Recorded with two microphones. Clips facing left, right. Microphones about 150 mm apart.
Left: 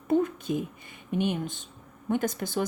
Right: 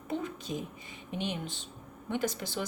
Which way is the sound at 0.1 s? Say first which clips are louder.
Left 10 dB; 50° left (ahead or behind).